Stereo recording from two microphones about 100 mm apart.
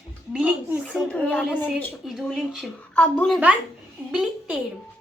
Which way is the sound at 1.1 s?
15° left (ahead or behind).